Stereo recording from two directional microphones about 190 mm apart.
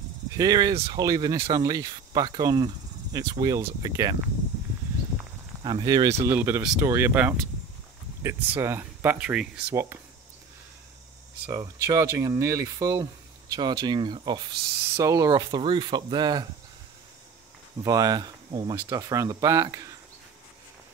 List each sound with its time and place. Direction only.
0.4 s speech: 20° right (ahead or behind)
5.6 s speech: 25° right (ahead or behind)
11.4 s speech: 20° right (ahead or behind)
17.8 s speech: 20° right (ahead or behind)